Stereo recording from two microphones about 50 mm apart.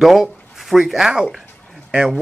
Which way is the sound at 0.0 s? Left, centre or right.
Centre.